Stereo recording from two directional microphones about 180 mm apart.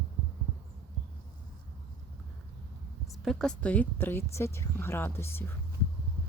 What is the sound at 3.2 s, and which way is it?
Speech, centre (ahead or behind).